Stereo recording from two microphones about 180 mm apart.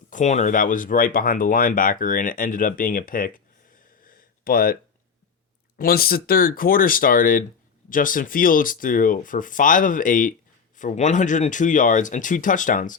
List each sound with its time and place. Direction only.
0.1 s speech: 40° left (ahead or behind)
4.0 s a sound: 55° left (ahead or behind)
5.7 s speech: 55° left (ahead or behind)